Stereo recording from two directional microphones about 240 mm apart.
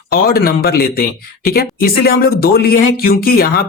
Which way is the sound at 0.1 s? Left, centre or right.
Left.